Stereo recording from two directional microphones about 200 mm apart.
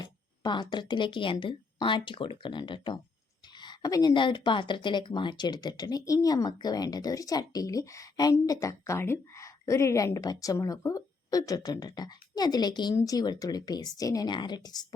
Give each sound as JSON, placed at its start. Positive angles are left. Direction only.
{"t": 0.0, "sound": "a woman's voice", "side_deg": 20}